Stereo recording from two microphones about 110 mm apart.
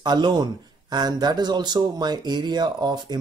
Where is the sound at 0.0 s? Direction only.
40° right (ahead or behind).